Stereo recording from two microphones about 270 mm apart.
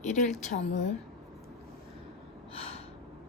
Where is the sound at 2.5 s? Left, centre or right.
Left.